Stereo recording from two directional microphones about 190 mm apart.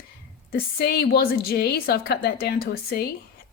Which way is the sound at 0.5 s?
55° left (ahead or behind).